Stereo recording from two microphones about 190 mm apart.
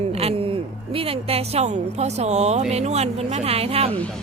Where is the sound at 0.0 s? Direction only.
30° right (ahead or behind).